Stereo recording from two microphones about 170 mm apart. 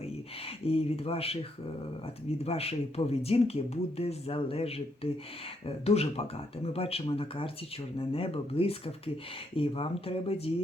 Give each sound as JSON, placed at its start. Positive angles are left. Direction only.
{"t": 0.7, "sound": "speech", "side_deg": 35}
{"t": 2.4, "sound": "speech", "side_deg": 35}